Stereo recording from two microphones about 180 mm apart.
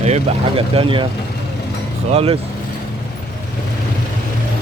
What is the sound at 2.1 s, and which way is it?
Speech, 30° right (ahead or behind).